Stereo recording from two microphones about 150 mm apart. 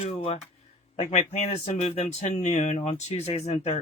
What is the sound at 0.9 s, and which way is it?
Speech, 50° left (ahead or behind).